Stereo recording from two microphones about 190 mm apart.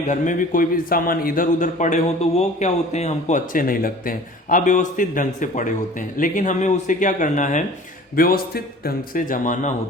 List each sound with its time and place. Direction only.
0.1 s a man's voice: 45° left (ahead or behind)